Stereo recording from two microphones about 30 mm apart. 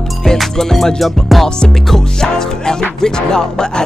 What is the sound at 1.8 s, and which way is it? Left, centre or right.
Music, centre.